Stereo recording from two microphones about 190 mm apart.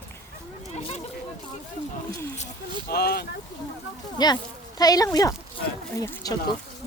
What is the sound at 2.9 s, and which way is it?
Speech, 55° left (ahead or behind).